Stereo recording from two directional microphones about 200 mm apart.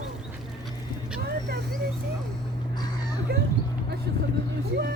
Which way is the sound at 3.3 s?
50° right (ahead or behind).